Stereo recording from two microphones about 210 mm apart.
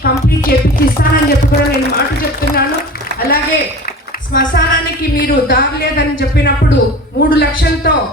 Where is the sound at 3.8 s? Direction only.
45° left (ahead or behind).